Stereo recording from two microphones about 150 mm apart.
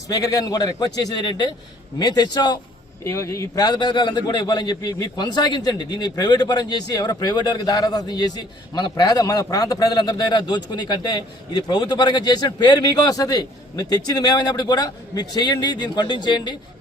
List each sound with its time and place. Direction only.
0.1 s a man's voice: 25° left (ahead or behind)